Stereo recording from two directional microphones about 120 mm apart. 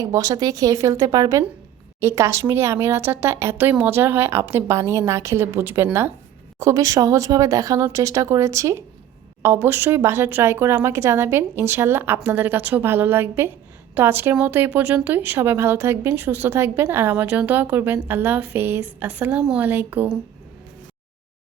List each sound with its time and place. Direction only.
0.0 s speech: 30° right (ahead or behind); by 20.1 s 15° right (ahead or behind)